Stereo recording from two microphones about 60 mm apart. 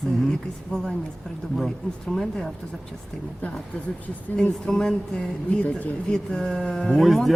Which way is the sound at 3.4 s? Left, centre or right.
Left.